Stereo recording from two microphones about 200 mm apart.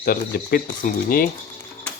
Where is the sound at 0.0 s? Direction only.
45° left (ahead or behind).